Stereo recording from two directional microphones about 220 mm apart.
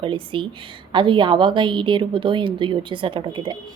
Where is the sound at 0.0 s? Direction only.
25° right (ahead or behind).